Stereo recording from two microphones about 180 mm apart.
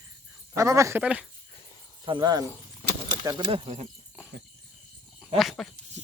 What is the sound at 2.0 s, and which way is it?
Speech, 25° right (ahead or behind).